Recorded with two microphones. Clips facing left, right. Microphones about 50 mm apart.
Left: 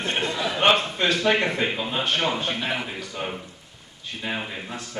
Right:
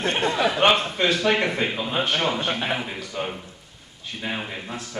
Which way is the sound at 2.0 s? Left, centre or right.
Right.